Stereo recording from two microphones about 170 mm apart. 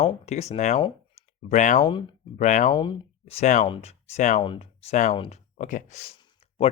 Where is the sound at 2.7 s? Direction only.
30° left (ahead or behind); by 4.4 s 45° left (ahead or behind).